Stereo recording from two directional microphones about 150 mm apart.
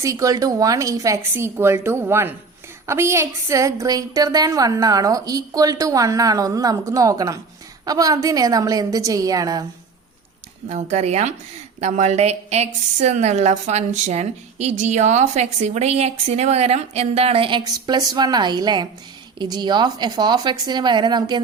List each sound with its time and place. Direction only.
0.0 s a woman's voice: 20° right (ahead or behind)
10.7 s a woman's voice: 50° right (ahead or behind)
17.6 s a woman's voice: 25° right (ahead or behind)